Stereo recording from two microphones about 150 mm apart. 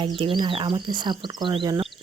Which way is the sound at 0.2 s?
35° right (ahead or behind).